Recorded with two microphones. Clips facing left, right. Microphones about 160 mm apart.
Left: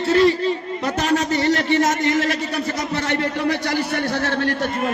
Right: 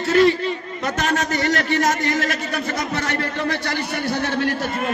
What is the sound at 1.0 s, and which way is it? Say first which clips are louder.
A man's voice: left 3 dB; 30° left (ahead or behind).